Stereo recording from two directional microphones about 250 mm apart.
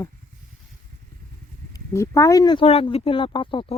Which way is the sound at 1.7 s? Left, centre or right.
Centre.